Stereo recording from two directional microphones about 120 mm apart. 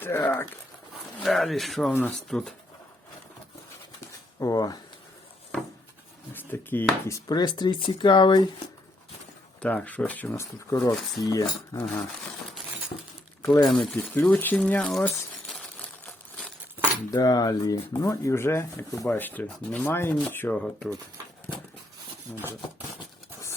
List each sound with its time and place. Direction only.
0.0 s speech: 20° left (ahead or behind)
1.2 s speech: centre (ahead or behind)
4.4 s speech: 30° left (ahead or behind)
6.3 s speech: 15° left (ahead or behind)
7.3 s speech: 35° left (ahead or behind)
9.6 s speech: 15° left (ahead or behind); by 11.9 s 30° left (ahead or behind)
12.9 s a sound: 60° left (ahead or behind)
13.4 s speech: 30° left (ahead or behind)
13.7 s a sound: 10° left (ahead or behind)
17.1 s speech: 35° left (ahead or behind)
19.1 s speech: 15° left (ahead or behind)
22.3 s speech: 5° left (ahead or behind)